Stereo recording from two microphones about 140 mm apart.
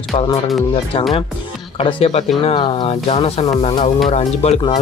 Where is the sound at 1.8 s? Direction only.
40° left (ahead or behind).